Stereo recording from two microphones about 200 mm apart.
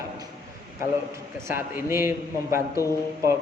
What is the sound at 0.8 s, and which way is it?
A man's voice, 15° right (ahead or behind).